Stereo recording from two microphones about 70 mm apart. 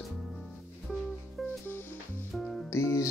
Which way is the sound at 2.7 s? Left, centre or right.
Left.